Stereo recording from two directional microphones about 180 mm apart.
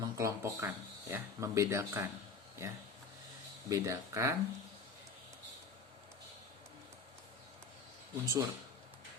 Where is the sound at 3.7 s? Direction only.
20° right (ahead or behind).